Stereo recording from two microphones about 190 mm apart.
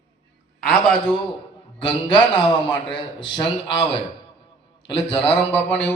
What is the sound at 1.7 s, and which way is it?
A man's voice, 25° left (ahead or behind).